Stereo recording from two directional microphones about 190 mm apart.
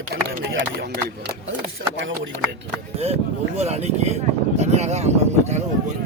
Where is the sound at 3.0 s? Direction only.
35° right (ahead or behind).